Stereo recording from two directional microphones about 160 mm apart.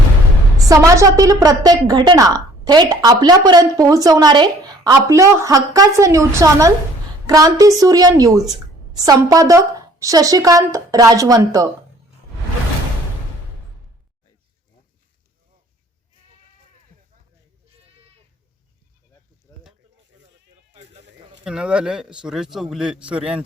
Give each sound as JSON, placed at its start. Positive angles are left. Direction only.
{"t": 0.7, "sound": "a woman's voice", "side_deg": -20}
{"t": 19.5, "sound": "a sound", "side_deg": 20}
{"t": 21.0, "sound": "bird", "side_deg": -90}
{"t": 21.4, "sound": "a man's voice", "side_deg": -5}